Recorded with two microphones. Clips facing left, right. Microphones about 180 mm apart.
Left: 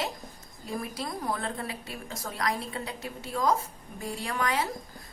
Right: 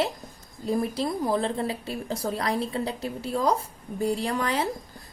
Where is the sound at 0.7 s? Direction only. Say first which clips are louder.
Right 8 dB; 30° right (ahead or behind).